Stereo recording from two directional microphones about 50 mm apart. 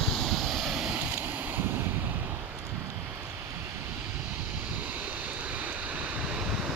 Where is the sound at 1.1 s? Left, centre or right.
Right.